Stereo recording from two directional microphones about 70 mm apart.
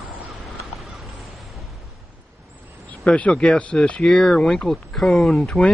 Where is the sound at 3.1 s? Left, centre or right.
Centre.